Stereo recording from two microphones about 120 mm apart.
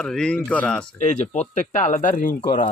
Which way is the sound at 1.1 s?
70° left (ahead or behind).